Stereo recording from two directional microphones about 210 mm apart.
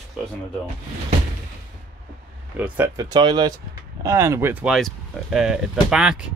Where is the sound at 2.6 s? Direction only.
15° right (ahead or behind).